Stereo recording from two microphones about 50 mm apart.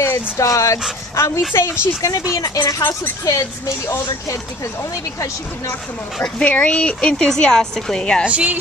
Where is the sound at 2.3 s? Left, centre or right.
Left.